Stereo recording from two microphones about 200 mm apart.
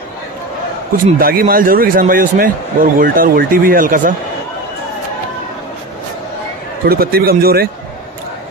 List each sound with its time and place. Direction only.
0.9 s a man's voice: 45° right (ahead or behind)
6.9 s a man's voice: 50° right (ahead or behind)